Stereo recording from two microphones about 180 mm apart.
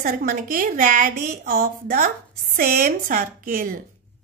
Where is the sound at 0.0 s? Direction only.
50° right (ahead or behind).